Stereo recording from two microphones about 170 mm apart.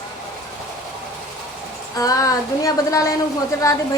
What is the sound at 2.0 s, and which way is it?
A woman's voice, 20° left (ahead or behind).